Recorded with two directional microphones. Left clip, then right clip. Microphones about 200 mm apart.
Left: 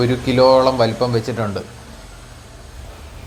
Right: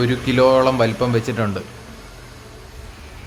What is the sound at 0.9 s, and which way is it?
Speech, 35° right (ahead or behind).